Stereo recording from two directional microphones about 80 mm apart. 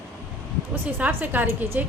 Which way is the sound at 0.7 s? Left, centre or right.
Right.